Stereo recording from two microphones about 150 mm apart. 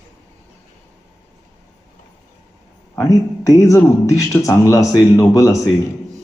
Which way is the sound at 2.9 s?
20° left (ahead or behind).